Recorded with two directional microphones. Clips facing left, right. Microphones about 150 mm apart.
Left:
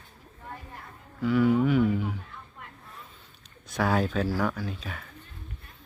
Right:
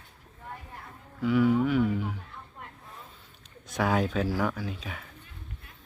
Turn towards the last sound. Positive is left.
turn(degrees=-15)  # may be behind; listen again after turning